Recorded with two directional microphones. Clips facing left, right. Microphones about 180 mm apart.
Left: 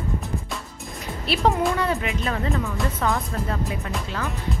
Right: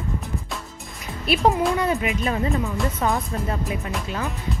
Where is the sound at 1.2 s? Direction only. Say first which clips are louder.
Right 2 dB; 15° right (ahead or behind).